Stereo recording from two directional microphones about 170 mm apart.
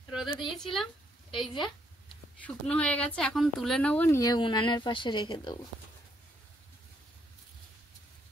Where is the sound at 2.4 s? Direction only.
10° left (ahead or behind); by 5.6 s 25° left (ahead or behind).